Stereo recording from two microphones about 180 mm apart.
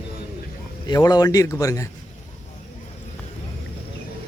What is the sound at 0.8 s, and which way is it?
Speech, 20° left (ahead or behind).